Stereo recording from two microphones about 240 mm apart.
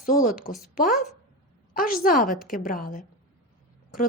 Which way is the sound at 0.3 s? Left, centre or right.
Left.